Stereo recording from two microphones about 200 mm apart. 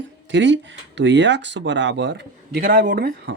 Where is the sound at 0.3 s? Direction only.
65° right (ahead or behind).